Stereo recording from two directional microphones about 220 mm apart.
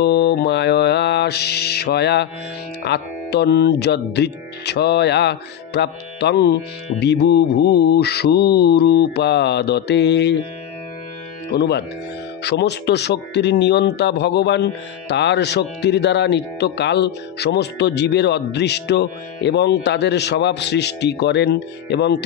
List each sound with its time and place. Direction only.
0.0 s mantra: 50° left (ahead or behind)
2.8 s speech: 50° left (ahead or behind)
11.5 s speech: 50° left (ahead or behind)